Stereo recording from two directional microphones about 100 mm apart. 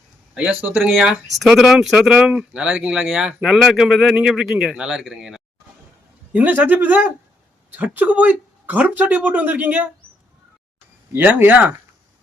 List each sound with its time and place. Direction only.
0.8 s speech: 5° right (ahead or behind)
2.1 s speech: 15° right (ahead or behind)
6.3 s speech: 15° right (ahead or behind)
11.1 s speech: 20° right (ahead or behind)